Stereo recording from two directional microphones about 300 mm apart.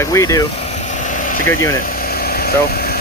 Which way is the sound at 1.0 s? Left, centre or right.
Left.